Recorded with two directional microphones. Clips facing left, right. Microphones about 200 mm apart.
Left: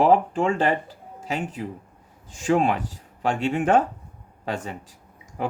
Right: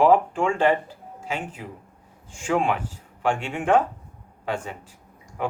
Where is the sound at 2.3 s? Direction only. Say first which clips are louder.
Left 2 dB; 40° left (ahead or behind).